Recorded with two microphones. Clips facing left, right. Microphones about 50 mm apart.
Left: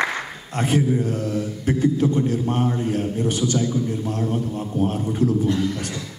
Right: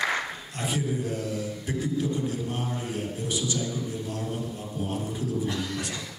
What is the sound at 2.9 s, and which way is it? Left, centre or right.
A man's voice, left.